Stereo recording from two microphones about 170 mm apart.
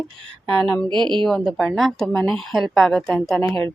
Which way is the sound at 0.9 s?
25° right (ahead or behind).